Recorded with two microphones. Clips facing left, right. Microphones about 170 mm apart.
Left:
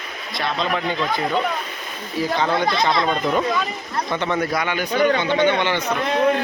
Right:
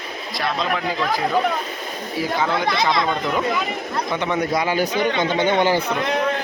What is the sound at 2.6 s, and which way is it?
Speech, centre (ahead or behind).